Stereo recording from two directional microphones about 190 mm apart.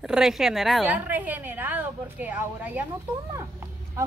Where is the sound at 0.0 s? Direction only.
5° right (ahead or behind).